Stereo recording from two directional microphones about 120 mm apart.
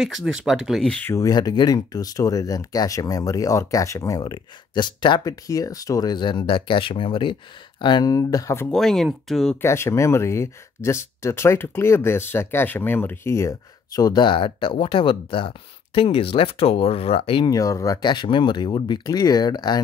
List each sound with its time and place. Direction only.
0.0 s speech: 5° right (ahead or behind)
1.1 s speech: 30° left (ahead or behind)
5.3 s speech: 30° left (ahead or behind)
8.6 s speech: 5° left (ahead or behind)
9.6 s speech: 20° left (ahead or behind); by 17.5 s 50° left (ahead or behind)
17.5 s speech: 30° left (ahead or behind)